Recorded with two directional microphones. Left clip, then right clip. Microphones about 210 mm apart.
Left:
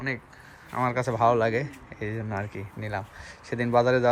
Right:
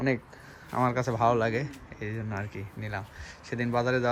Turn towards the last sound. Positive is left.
turn(degrees=-10)  # may be behind; listen again after turning